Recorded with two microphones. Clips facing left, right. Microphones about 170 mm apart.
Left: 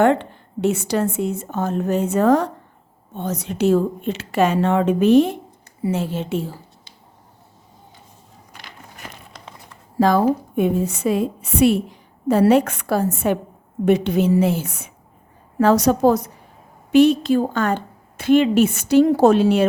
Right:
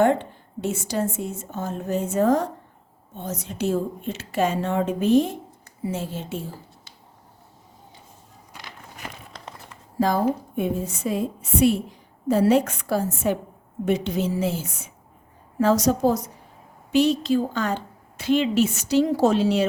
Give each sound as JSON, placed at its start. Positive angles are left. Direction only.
{"t": 0.0, "sound": "a woman's voice", "side_deg": 70}
{"t": 10.0, "sound": "a woman's voice", "side_deg": 75}